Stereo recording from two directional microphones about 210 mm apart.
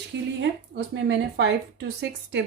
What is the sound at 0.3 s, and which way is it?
Speech, 55° right (ahead or behind).